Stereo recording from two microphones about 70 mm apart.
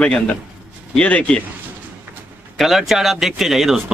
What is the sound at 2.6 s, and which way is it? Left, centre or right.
A man's voice, centre.